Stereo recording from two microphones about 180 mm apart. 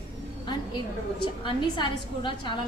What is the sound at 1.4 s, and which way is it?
A woman's voice, 25° left (ahead or behind).